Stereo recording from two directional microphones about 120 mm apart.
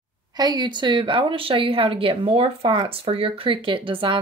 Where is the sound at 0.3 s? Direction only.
35° right (ahead or behind).